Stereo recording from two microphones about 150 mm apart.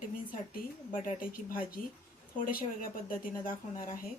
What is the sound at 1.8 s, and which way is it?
Speech, 70° left (ahead or behind).